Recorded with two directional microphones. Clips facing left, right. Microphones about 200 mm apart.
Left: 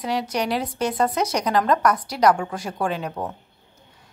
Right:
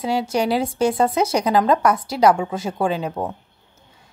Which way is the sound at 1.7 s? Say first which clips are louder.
Right 2 dB; 25° right (ahead or behind).